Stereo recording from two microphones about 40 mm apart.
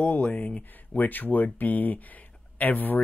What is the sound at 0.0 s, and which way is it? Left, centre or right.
Speech, left.